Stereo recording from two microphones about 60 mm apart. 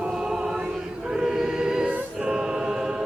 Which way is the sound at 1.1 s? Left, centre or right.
Centre.